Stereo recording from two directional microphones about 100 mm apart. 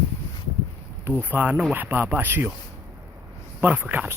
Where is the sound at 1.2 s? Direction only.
15° right (ahead or behind).